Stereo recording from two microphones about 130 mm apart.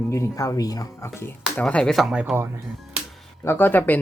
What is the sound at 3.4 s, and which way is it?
Speech, 15° left (ahead or behind).